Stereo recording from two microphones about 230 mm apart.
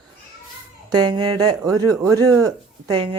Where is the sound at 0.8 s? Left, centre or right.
Centre.